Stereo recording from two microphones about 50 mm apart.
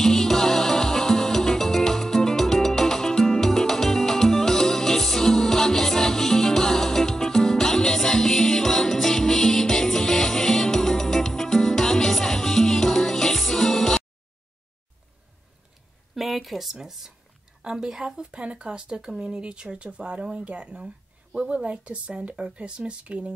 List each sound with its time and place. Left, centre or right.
0.0 s music: centre
16.2 s a woman's voice: centre; by 23.3 s right